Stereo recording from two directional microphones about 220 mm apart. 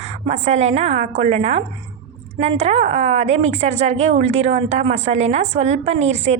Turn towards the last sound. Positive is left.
turn(degrees=-30)  # may be behind; listen again after turning